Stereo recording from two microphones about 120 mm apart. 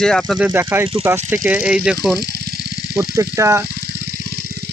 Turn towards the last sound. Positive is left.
turn(degrees=-25)  # may be behind; listen again after turning